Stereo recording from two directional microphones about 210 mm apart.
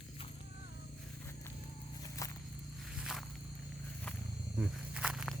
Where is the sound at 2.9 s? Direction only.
Centre (ahead or behind).